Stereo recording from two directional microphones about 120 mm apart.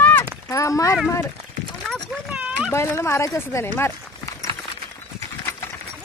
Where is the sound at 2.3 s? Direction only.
10° right (ahead or behind).